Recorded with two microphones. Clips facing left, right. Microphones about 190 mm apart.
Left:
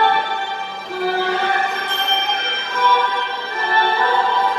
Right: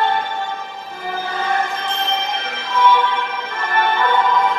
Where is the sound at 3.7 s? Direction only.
35° left (ahead or behind).